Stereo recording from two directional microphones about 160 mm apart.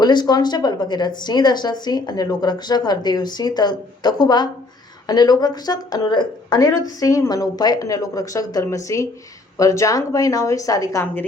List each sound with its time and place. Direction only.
0.0 s speech: 25° left (ahead or behind)